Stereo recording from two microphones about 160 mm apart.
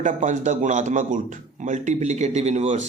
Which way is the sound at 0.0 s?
50° right (ahead or behind).